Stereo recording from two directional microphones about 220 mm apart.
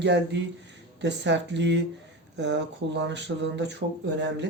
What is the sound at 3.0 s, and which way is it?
Speech, 55° right (ahead or behind).